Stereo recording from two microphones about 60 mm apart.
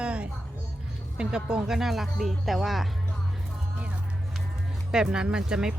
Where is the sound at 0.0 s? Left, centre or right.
Centre.